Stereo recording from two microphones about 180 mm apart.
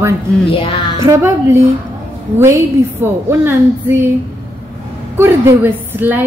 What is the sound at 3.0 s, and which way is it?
A woman's voice, 10° right (ahead or behind).